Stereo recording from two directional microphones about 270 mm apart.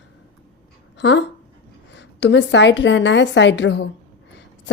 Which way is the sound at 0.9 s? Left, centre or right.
Left.